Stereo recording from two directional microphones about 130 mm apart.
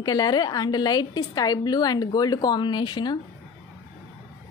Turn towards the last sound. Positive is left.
turn(degrees=35)  # may be behind; listen again after turning